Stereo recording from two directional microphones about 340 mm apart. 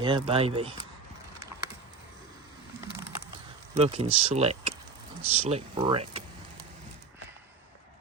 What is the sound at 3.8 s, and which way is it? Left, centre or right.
Speech, centre.